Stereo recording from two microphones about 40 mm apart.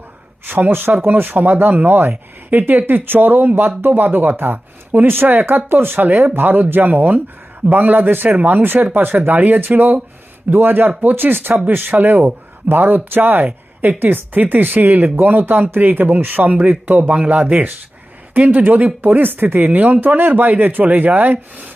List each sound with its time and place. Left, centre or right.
0.4 s speech: right
12.2 s speech: right